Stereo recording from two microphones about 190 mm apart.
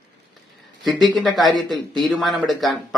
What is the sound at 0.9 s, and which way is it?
Speech, centre (ahead or behind).